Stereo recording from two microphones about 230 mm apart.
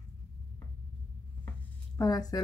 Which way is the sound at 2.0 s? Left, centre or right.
Centre.